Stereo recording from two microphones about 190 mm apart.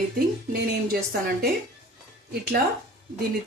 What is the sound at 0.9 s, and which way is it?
Speech, 55° right (ahead or behind).